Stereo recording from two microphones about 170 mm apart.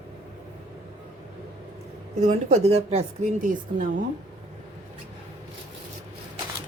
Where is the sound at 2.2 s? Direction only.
45° right (ahead or behind).